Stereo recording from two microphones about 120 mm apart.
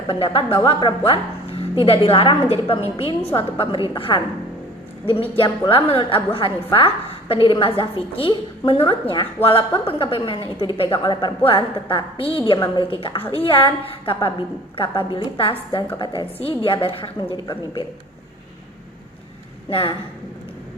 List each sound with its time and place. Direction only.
0.1 s a woman's voice: 50° left (ahead or behind)
19.7 s a woman's voice: 45° left (ahead or behind)